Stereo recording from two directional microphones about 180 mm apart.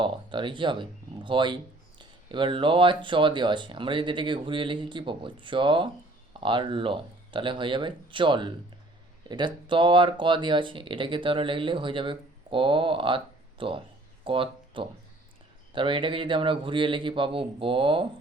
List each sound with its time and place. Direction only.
0.0 s speech: 25° right (ahead or behind)